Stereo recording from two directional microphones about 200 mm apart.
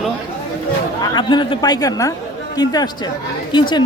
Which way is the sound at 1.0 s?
20° left (ahead or behind).